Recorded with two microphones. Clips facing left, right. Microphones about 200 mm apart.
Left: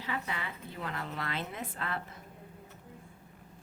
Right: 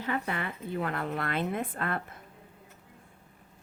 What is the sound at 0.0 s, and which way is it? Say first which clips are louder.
Speech: right 5 dB; 55° right (ahead or behind).